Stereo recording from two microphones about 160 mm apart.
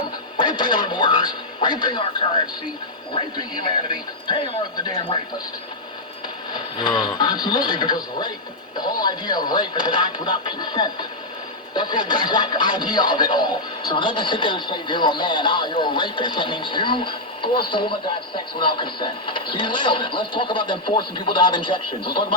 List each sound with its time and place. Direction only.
0.3 s speech: 30° left (ahead or behind)
3.2 s speech: 30° left (ahead or behind)
5.1 s speech: 25° left (ahead or behind)
6.5 s speech: 25° left (ahead or behind)